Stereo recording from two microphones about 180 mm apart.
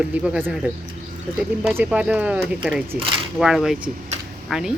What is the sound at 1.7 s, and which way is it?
Speech, 10° right (ahead or behind).